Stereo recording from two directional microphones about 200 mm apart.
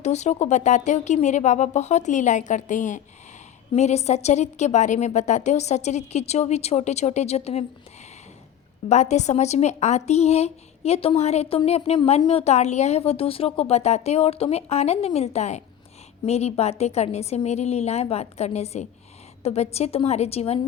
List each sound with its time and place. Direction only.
0.0 s a woman's voice: 35° left (ahead or behind)
8.9 s a woman's voice: 35° left (ahead or behind)